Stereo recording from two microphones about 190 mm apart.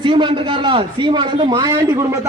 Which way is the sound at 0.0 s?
25° right (ahead or behind).